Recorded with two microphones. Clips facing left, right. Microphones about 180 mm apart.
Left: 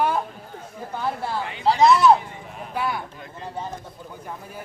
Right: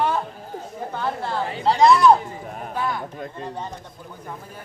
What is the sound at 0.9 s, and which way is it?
Speech, 10° left (ahead or behind).